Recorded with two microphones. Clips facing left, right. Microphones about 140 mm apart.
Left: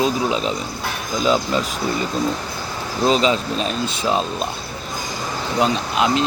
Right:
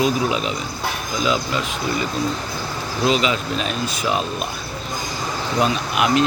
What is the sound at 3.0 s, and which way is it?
Speech, 35° left (ahead or behind).